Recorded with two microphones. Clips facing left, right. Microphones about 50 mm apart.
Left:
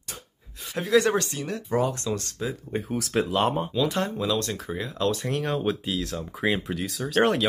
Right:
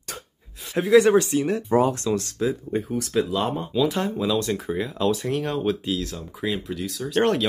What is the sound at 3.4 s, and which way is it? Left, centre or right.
Speech, left.